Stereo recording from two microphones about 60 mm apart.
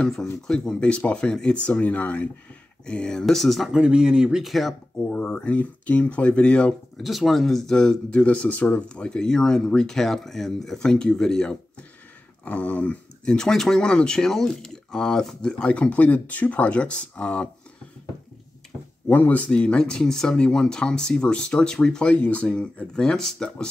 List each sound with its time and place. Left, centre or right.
0.0 s speech: centre; by 2.2 s left
2.9 s speech: centre
3.7 s speech: centre
5.1 s speech: centre
7.0 s speech: centre
8.2 s speech: left
12.4 s speech: left
19.0 s speech: left; by 23.7 s centre